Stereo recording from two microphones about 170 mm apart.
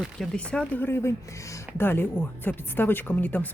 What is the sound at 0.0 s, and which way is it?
Speech, 5° left (ahead or behind).